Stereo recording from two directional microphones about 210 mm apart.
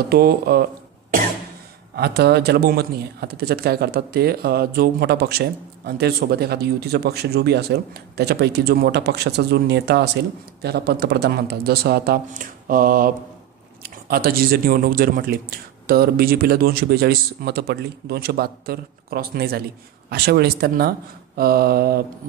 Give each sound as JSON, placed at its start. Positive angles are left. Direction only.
{"t": 0.1, "sound": "speech", "side_deg": -45}
{"t": 2.0, "sound": "speech", "side_deg": -50}